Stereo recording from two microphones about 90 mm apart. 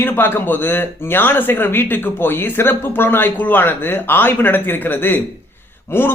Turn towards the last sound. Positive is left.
turn(degrees=25)  # may be behind; listen again after turning